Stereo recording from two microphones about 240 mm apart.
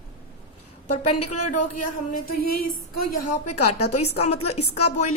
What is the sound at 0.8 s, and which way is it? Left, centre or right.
Speech, left.